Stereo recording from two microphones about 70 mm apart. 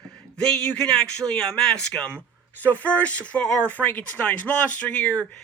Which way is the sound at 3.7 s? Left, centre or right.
Left.